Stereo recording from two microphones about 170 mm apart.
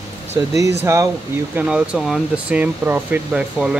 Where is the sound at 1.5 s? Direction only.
5° right (ahead or behind).